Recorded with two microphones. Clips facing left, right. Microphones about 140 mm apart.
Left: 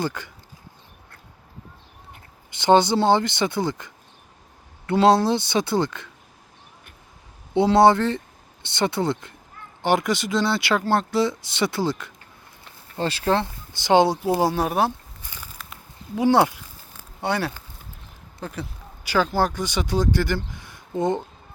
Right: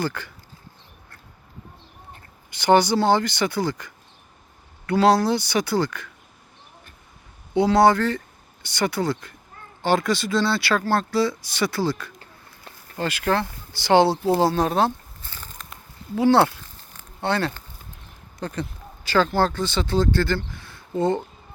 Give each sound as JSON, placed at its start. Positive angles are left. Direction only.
{"t": 0.0, "sound": "speech", "side_deg": 20}
{"t": 2.1, "sound": "speech", "side_deg": 20}
{"t": 7.5, "sound": "speech", "side_deg": 25}